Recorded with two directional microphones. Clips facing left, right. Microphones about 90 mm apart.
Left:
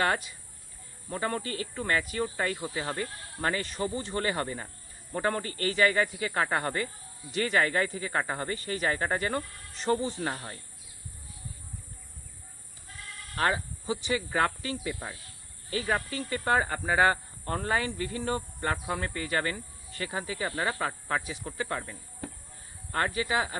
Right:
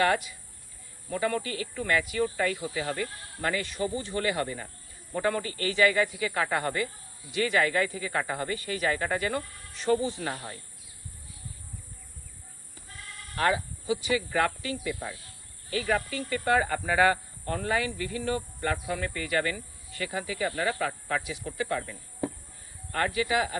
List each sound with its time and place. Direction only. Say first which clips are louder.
0.0 s speech: right 3 dB; 30° left (ahead or behind)
13.4 s speech: right 2 dB; 35° left (ahead or behind)
22.9 s speech: right 1 dB; 30° left (ahead or behind)